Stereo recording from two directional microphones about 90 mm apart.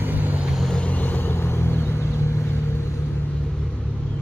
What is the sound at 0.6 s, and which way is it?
Vehicle, 10° left (ahead or behind).